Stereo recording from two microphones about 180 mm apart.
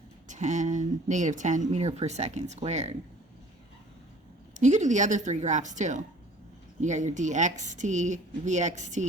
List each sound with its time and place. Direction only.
0.3 s speech: 40° right (ahead or behind)
4.5 s speech: 40° right (ahead or behind)